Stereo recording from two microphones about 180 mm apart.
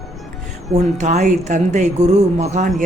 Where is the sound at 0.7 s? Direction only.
40° right (ahead or behind).